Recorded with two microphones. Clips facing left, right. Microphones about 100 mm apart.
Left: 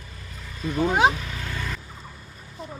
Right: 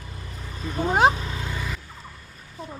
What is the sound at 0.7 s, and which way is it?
Speech, 30° right (ahead or behind).